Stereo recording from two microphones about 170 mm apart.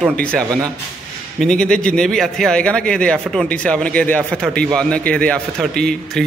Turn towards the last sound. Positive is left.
turn(degrees=5)  # may be behind; listen again after turning